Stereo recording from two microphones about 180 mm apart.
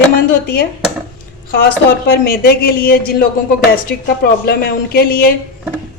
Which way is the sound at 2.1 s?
60° left (ahead or behind).